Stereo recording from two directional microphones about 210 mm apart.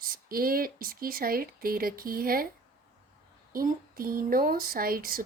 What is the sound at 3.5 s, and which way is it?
Speech, 45° right (ahead or behind).